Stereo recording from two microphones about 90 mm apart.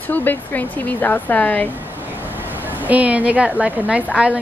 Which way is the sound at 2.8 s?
15° right (ahead or behind).